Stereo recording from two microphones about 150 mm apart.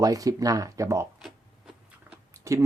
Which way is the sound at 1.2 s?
Centre (ahead or behind).